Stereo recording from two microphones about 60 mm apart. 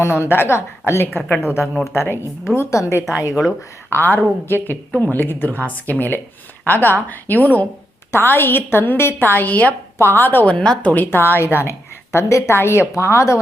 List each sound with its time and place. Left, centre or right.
0.0 s a woman's voice: left
1.6 s speech: centre
2.0 s a woman's voice: left
2.6 s a woman's voice: left
3.8 s a woman's voice: left